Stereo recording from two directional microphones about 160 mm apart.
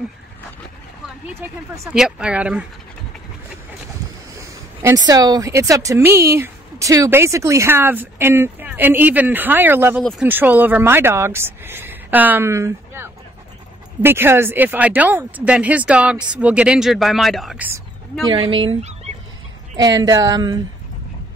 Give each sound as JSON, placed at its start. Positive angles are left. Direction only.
{"t": 1.9, "sound": "speech", "side_deg": -5}
{"t": 4.4, "sound": "speech", "side_deg": -20}
{"t": 18.3, "sound": "speech", "side_deg": -30}
{"t": 19.8, "sound": "speech", "side_deg": -20}